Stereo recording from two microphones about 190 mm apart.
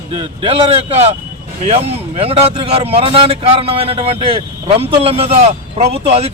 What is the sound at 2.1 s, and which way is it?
A man's voice, 30° right (ahead or behind).